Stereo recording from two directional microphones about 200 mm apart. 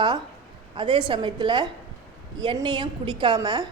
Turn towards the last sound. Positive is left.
turn(degrees=-20)  # may be behind; listen again after turning